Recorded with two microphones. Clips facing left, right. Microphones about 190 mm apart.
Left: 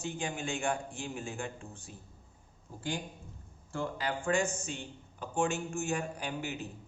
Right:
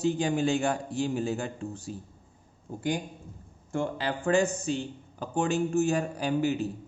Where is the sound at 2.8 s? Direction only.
15° right (ahead or behind).